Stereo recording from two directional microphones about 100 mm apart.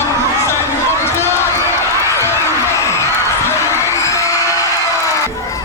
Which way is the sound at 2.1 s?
25° left (ahead or behind).